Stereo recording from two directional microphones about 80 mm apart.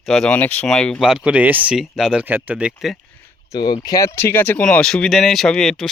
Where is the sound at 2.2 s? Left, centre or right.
Right.